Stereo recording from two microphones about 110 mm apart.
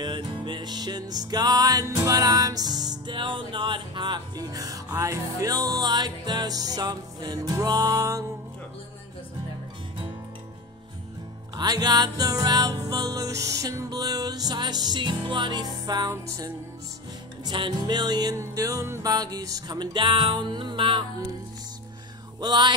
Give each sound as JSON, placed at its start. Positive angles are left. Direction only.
{"t": 0.0, "sound": "music", "side_deg": -45}
{"t": 11.5, "sound": "music", "side_deg": -35}
{"t": 22.4, "sound": "music", "side_deg": -40}